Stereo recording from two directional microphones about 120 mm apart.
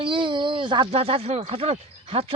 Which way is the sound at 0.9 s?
55° right (ahead or behind).